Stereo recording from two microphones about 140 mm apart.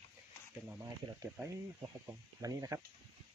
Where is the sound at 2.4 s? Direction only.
25° right (ahead or behind).